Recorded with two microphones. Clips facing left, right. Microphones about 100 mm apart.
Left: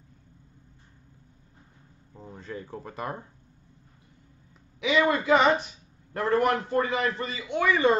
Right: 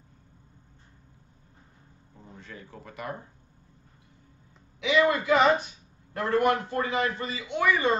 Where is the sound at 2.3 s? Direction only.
35° left (ahead or behind).